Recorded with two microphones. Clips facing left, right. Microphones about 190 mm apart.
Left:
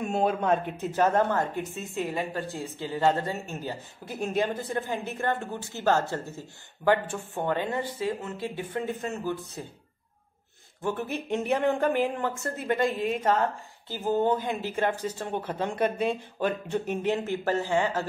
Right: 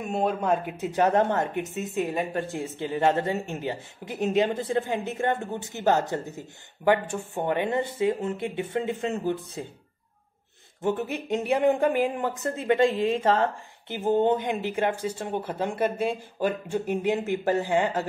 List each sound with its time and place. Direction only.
0.0 s a woman's voice: centre (ahead or behind); by 9.7 s 20° right (ahead or behind)
10.8 s a woman's voice: 20° right (ahead or behind)
14.8 s speech: 10° right (ahead or behind)